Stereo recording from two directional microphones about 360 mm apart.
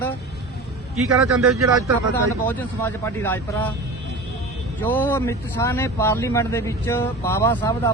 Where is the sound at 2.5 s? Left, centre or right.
Centre.